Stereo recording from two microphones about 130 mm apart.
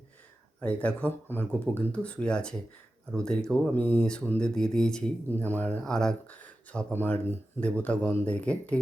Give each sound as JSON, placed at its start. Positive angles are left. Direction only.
{"t": 0.6, "sound": "speech", "side_deg": 10}